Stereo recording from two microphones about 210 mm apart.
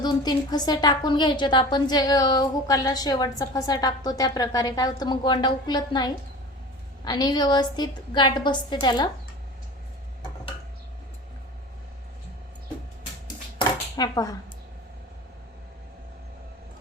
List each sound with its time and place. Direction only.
0.0 s a woman's voice: 20° left (ahead or behind)
13.6 s dishes: 20° left (ahead or behind)